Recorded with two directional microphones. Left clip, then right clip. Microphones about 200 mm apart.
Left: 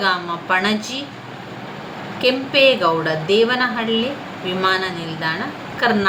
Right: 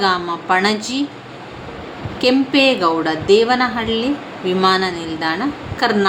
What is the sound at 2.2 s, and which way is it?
A woman's voice, 35° right (ahead or behind).